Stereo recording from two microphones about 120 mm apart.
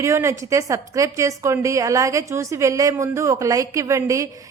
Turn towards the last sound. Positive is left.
turn(degrees=-25)  # may be behind; listen again after turning